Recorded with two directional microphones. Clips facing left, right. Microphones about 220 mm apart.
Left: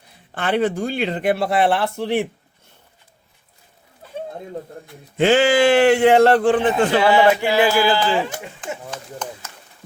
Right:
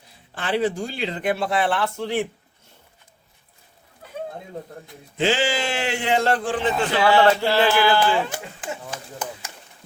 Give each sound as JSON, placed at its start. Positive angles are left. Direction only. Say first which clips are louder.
{"t": 0.3, "sound": "speech", "louder": "left 3 dB", "side_deg": 60}
{"t": 5.2, "sound": "speech", "louder": "left 8 dB", "side_deg": 55}
{"t": 7.0, "sound": "speech", "louder": "right 1 dB", "side_deg": 15}